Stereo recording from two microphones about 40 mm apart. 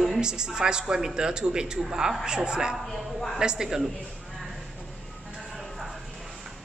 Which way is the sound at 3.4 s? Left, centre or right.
Centre.